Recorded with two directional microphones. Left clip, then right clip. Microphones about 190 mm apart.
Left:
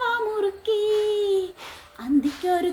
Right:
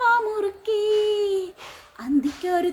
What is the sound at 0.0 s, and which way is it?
Child singing, 20° right (ahead or behind).